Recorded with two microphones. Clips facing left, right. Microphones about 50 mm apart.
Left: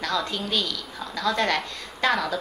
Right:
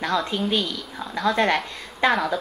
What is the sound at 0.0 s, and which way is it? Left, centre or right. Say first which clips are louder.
A woman's voice: right 4 dB; centre.